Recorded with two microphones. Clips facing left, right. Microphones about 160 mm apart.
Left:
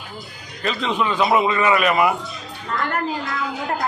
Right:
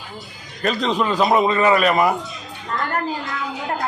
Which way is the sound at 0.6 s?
40° right (ahead or behind).